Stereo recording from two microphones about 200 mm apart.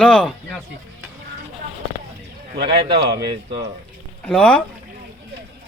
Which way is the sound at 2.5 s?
55° right (ahead or behind).